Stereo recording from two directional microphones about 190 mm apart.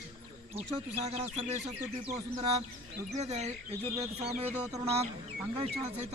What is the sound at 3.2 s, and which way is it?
Speech, 35° right (ahead or behind).